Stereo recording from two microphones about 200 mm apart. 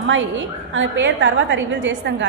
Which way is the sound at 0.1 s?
70° right (ahead or behind).